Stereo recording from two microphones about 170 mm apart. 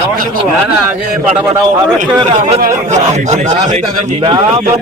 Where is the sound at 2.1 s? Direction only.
40° right (ahead or behind).